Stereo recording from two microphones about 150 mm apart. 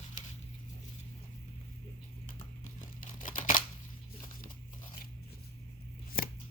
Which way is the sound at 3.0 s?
60° left (ahead or behind).